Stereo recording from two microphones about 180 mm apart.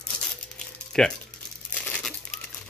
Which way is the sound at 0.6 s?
5° left (ahead or behind).